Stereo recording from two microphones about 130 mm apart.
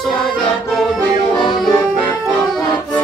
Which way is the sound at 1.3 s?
30° left (ahead or behind).